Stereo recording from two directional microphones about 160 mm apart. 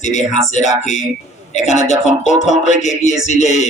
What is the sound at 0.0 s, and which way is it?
Speech, 50° left (ahead or behind).